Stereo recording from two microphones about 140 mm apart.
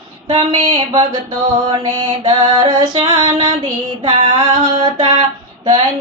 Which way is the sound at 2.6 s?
30° right (ahead or behind).